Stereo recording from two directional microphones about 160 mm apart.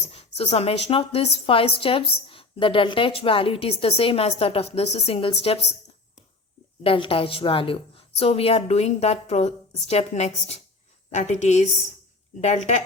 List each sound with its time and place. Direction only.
0.1 s speech: 40° left (ahead or behind)
6.8 s a woman's voice: 35° left (ahead or behind)